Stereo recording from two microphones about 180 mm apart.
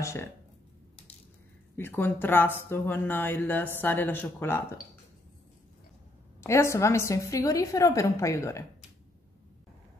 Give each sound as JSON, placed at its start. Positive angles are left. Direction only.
{"t": 0.0, "sound": "a woman's voice", "side_deg": 15}
{"t": 1.8, "sound": "a woman's voice", "side_deg": 10}
{"t": 6.4, "sound": "a woman's voice", "side_deg": 15}